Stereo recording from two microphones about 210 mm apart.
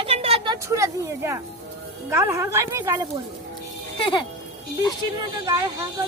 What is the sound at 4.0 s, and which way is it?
Speech, 25° left (ahead or behind).